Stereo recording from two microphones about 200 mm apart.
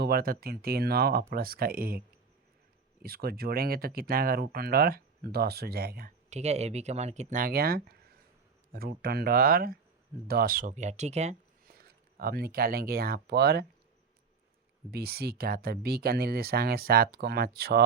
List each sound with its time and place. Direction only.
0.0 s speech: 50° right (ahead or behind)
3.0 s speech: 50° right (ahead or behind)
6.3 s speech: 35° right (ahead or behind)
11.6 s speech: 50° right (ahead or behind)
14.8 s speech: 50° right (ahead or behind)